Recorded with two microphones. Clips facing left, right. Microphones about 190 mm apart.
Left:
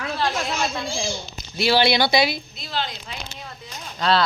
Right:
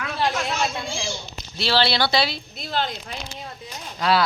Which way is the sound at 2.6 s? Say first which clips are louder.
Right 6 dB; 55° right (ahead or behind).